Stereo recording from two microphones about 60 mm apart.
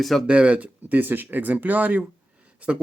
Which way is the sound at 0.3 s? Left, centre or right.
Centre.